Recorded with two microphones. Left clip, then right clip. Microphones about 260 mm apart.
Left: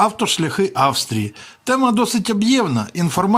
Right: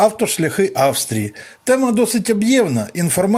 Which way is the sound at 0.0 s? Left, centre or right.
Centre.